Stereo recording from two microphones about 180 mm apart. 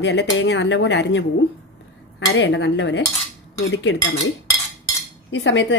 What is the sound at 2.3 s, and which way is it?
Speech, 85° left.